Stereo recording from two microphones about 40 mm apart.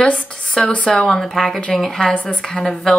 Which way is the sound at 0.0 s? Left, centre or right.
Left.